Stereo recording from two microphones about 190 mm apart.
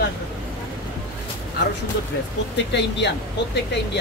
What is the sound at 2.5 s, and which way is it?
Speech, 65° left (ahead or behind).